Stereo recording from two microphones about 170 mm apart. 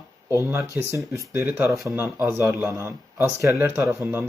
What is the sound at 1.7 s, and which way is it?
Speech, centre (ahead or behind).